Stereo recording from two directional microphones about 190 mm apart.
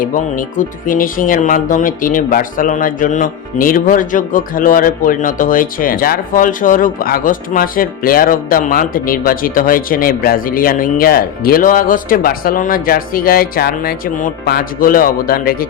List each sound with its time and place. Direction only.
0.0 s speech: 45° left (ahead or behind)